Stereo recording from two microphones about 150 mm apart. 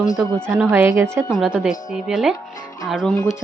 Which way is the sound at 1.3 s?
5° right (ahead or behind).